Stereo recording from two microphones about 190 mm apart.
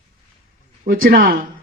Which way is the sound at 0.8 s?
50° right (ahead or behind).